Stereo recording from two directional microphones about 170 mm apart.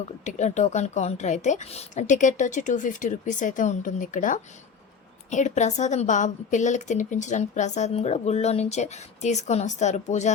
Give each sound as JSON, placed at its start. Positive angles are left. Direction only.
{"t": 0.3, "sound": "a woman's voice", "side_deg": 45}